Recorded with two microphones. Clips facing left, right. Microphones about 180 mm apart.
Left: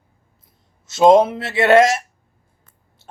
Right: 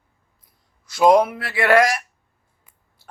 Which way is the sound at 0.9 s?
25° left (ahead or behind).